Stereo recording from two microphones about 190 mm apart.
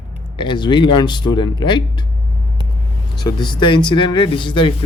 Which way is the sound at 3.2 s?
25° left (ahead or behind).